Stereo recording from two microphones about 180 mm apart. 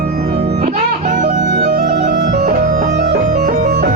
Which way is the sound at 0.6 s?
40° right (ahead or behind).